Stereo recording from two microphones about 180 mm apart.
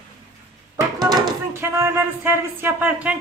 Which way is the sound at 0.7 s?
20° right (ahead or behind).